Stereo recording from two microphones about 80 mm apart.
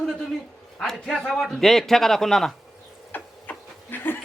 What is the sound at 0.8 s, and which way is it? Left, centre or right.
A man's voice, centre.